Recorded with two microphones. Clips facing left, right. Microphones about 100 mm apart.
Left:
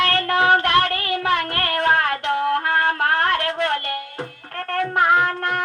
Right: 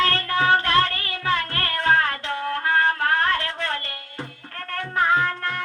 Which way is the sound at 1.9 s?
65° left (ahead or behind).